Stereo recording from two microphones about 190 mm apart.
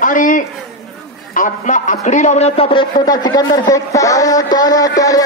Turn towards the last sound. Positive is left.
turn(degrees=20)  # may be behind; listen again after turning